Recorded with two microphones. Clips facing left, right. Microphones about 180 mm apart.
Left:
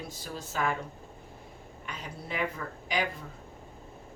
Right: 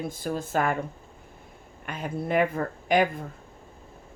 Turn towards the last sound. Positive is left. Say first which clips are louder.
# right 9 dB
turn(degrees=-50)  # may be behind; listen again after turning